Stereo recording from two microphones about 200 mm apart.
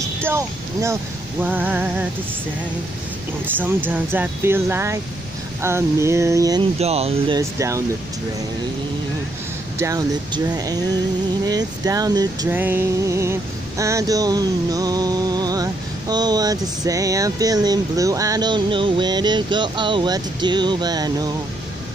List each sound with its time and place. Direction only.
0.2 s speech: 15° right (ahead or behind)
3.9 s speech: 10° right (ahead or behind)
6.8 s speech: 30° right (ahead or behind)
7.3 s speech: 15° right (ahead or behind)
9.8 s speech: 15° right (ahead or behind)
11.4 s a sound: 20° right (ahead or behind)